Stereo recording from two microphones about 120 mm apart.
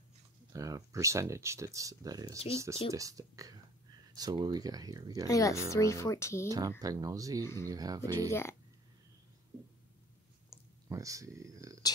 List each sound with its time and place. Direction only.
0.5 s speech: 30° right (ahead or behind)
5.3 s speech: 25° left (ahead or behind)
6.8 s speech: 30° right (ahead or behind)
7.4 s speech: 20° left (ahead or behind)
7.7 s speech: 30° right (ahead or behind)
8.3 s speech: 20° left (ahead or behind)
10.9 s speech: 25° right (ahead or behind)